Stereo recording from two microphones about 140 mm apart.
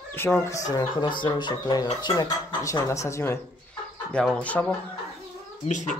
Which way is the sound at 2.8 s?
20° left (ahead or behind).